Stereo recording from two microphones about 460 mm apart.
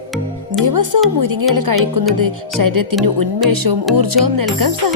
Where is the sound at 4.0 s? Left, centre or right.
Right.